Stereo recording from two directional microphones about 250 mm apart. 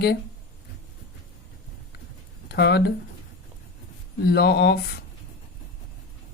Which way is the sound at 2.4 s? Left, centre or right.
Left.